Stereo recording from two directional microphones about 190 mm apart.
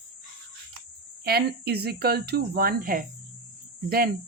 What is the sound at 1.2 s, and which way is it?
Speech, 55° right (ahead or behind).